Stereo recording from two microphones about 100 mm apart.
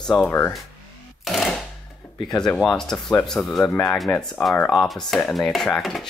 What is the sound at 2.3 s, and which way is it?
Speech, 5° left (ahead or behind).